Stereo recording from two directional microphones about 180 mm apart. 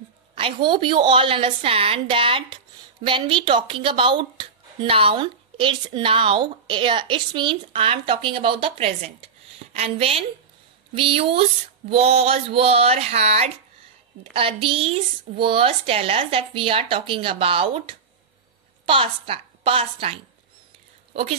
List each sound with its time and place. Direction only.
0.4 s a woman's voice: 30° right (ahead or behind)